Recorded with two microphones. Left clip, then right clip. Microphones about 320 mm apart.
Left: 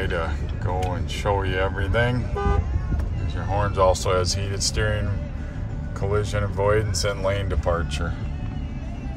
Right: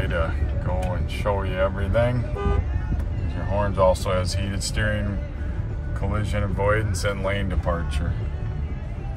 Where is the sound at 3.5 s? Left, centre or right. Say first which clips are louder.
Even; left.